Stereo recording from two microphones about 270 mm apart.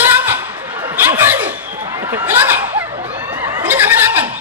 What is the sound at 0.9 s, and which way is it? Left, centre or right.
Laughter, centre.